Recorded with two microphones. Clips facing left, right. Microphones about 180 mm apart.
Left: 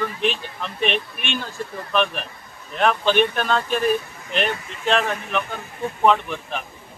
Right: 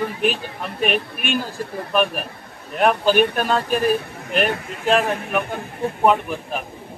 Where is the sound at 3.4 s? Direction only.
40° right (ahead or behind).